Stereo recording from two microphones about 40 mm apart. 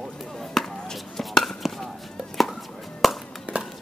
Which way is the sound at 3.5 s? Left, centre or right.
Right.